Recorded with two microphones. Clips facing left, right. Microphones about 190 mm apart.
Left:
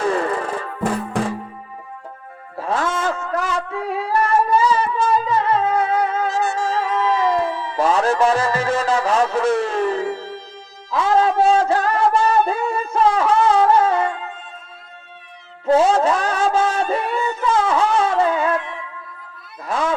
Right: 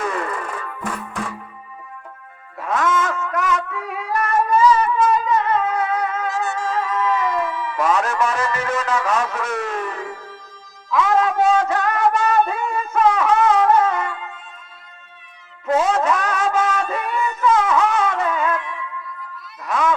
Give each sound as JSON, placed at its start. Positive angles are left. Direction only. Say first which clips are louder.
{"t": 0.0, "sound": "music", "louder": "left 5 dB", "side_deg": 30}
{"t": 2.6, "sound": "a sound", "louder": "right 1 dB", "side_deg": 30}
{"t": 15.6, "sound": "music", "louder": "left 3 dB", "side_deg": 30}
{"t": 19.6, "sound": "cat", "louder": "right 1 dB", "side_deg": 30}